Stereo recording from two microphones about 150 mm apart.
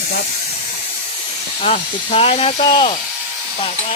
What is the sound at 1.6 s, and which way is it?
Speech, 45° left (ahead or behind).